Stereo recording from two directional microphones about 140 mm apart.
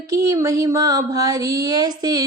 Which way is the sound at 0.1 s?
25° right (ahead or behind).